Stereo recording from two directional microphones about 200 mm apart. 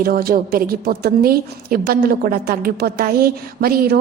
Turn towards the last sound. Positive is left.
turn(degrees=-50)  # may be behind; listen again after turning